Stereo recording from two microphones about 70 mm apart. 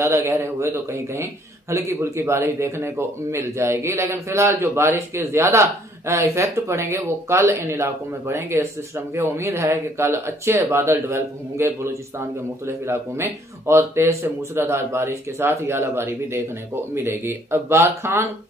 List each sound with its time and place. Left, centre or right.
0.0 s a man's voice: right